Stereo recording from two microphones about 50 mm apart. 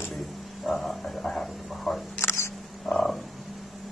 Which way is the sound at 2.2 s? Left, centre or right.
Left.